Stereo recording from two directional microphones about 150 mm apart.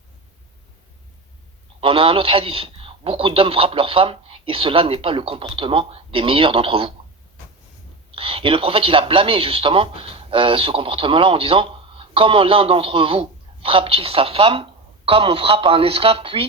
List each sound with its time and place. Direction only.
1.8 s a man's voice: 35° right (ahead or behind)
8.1 s a man's voice: 35° right (ahead or behind)